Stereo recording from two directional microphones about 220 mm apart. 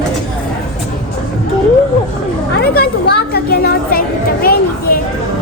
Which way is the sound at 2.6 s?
45° left (ahead or behind).